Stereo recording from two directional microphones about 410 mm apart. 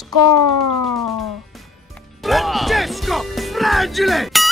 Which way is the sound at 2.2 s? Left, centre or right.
Centre.